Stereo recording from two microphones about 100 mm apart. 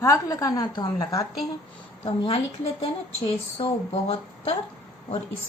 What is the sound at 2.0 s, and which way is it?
Speech, 70° left (ahead or behind).